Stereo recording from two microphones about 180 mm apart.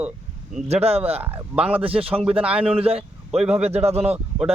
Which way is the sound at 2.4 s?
5° right (ahead or behind).